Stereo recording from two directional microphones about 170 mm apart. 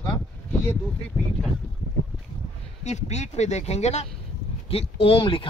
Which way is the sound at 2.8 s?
40° left (ahead or behind).